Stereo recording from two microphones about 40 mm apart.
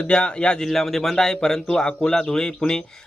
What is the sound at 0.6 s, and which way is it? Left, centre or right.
Speech, centre.